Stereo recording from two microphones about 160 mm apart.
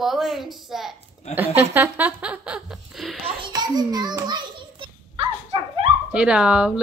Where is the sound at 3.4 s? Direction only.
25° right (ahead or behind).